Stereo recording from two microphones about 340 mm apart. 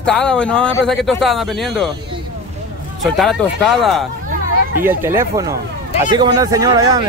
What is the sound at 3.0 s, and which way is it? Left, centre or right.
A man's voice, centre.